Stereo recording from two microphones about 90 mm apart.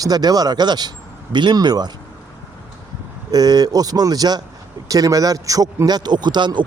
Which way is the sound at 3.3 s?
45° right (ahead or behind).